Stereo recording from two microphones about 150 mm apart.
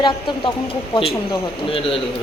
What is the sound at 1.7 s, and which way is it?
Speech, 35° left (ahead or behind).